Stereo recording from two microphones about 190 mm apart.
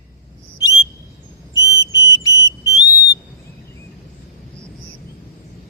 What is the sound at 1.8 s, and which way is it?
Fire alarm, 20° left (ahead or behind).